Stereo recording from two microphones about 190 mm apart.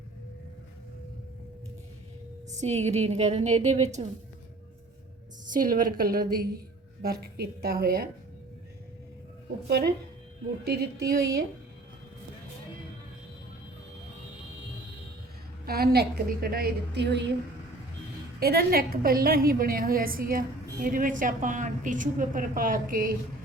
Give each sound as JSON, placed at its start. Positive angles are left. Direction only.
{"t": 2.5, "sound": "a woman's voice", "side_deg": -35}
{"t": 5.5, "sound": "a woman's voice", "side_deg": -50}
{"t": 9.6, "sound": "a woman's voice", "side_deg": -60}
{"t": 15.6, "sound": "a woman's voice", "side_deg": -55}
{"t": 18.3, "sound": "a woman's voice", "side_deg": -55}